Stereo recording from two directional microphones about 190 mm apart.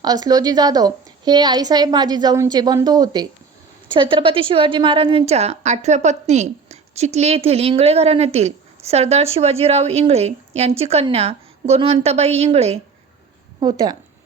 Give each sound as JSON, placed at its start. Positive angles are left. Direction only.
{"t": 0.0, "sound": "a woman's voice", "side_deg": -20}
{"t": 13.6, "sound": "a woman's voice", "side_deg": -20}